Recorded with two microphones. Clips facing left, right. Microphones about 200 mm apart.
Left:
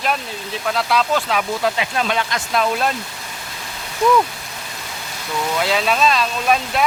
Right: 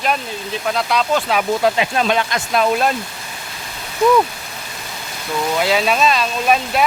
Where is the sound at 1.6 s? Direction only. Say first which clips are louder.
Right 4 dB; 30° right (ahead or behind).